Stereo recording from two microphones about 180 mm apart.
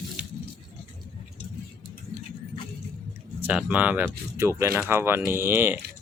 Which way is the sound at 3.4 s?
10° right (ahead or behind).